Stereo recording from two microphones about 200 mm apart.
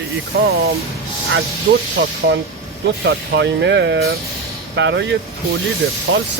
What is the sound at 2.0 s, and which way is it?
Speech, 65° right (ahead or behind).